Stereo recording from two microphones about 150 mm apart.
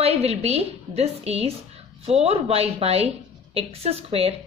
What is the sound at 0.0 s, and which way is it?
A woman's voice, 45° right (ahead or behind).